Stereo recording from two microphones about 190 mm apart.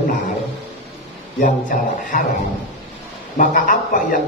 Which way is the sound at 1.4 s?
45° left (ahead or behind).